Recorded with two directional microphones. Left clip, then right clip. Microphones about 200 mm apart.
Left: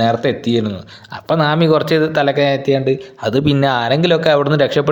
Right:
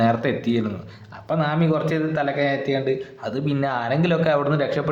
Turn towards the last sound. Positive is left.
turn(degrees=40)  # may be behind; listen again after turning